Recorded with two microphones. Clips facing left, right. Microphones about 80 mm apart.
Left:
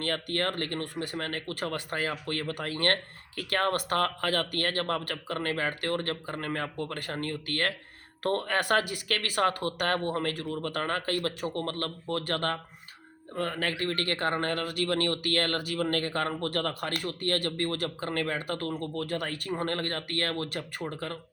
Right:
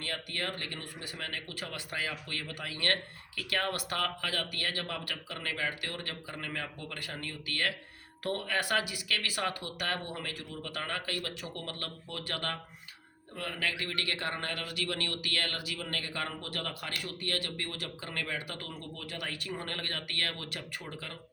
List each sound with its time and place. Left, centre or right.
0.0 s speech: left